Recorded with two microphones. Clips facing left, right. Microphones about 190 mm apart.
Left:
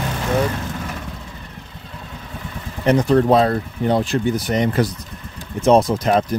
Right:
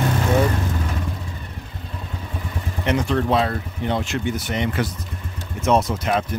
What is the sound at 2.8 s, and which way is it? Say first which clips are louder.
Speech: left 6 dB; 40° left (ahead or behind).